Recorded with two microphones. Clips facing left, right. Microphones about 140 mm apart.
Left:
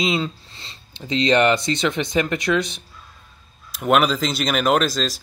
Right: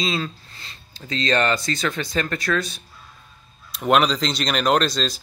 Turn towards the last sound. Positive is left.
turn(degrees=0)  # may be behind; listen again after turning